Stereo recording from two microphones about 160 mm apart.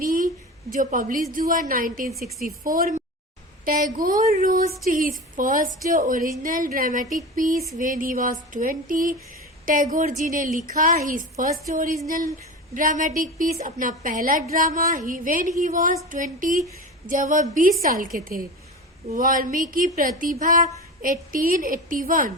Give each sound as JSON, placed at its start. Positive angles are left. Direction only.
{"t": 0.0, "sound": "a sound", "side_deg": -60}
{"t": 0.8, "sound": "speech", "side_deg": -50}
{"t": 2.0, "sound": "speech", "side_deg": 0}
{"t": 3.7, "sound": "speech", "side_deg": -55}